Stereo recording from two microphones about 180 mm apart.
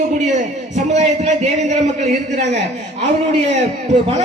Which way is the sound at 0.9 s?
40° right (ahead or behind).